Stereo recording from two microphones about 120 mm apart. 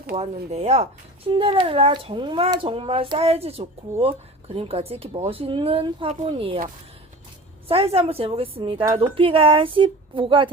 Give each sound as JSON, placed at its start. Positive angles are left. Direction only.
{"t": 0.2, "sound": "speech", "side_deg": -60}
{"t": 1.3, "sound": "speech", "side_deg": -50}
{"t": 7.9, "sound": "speech", "side_deg": -55}